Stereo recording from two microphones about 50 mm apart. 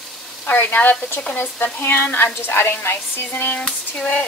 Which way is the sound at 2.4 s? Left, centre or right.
Left.